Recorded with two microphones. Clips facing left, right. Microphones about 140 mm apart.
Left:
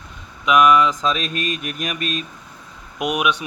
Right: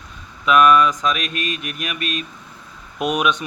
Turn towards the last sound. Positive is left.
turn(degrees=10)  # may be behind; listen again after turning